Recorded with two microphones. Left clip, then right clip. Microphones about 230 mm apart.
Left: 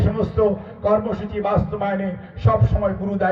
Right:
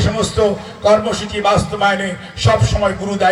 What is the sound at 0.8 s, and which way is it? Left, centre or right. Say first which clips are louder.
A man's voice: right 7 dB; centre.